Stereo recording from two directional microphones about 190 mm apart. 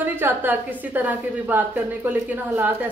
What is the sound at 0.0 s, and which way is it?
Speech, 10° right (ahead or behind).